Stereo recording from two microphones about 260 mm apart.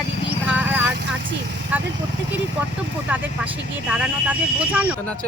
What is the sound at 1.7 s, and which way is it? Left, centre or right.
Speech, centre.